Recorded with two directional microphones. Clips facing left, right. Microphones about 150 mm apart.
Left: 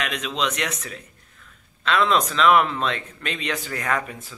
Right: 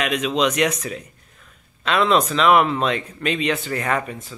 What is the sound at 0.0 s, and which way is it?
Speech, 10° right (ahead or behind).